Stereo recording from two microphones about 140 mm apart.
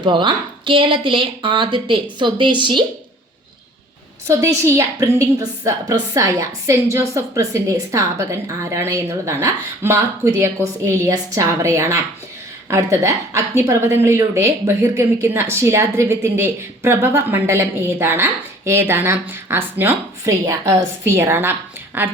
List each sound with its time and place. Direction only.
0.0 s speech: 35° right (ahead or behind)
4.3 s a woman's voice: 20° right (ahead or behind)